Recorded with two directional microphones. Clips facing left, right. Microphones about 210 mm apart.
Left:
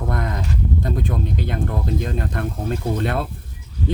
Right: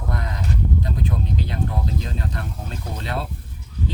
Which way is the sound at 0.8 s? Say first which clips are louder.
Left 3 dB; 50° left (ahead or behind).